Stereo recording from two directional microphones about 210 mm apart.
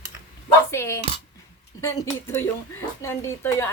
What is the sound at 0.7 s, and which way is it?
A woman's voice, 10° left (ahead or behind).